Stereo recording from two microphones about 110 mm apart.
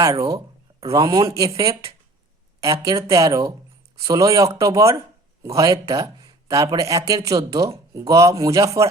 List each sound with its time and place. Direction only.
0.0 s speech: 30° right (ahead or behind)